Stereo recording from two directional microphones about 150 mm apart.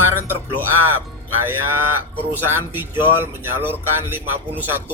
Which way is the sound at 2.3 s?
15° right (ahead or behind).